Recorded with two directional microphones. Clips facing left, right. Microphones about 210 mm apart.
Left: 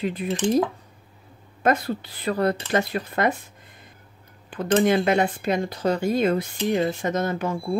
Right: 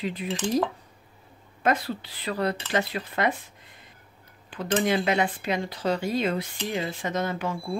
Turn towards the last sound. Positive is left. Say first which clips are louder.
# left 4 dB
turn(degrees=45)  # may be behind; listen again after turning